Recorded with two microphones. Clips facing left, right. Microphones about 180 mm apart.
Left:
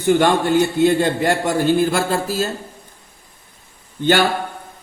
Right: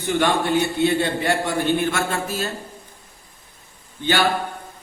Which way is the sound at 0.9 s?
45° left (ahead or behind).